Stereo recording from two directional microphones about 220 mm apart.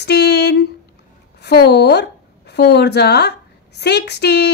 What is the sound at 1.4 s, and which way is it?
Speech, 50° left (ahead or behind).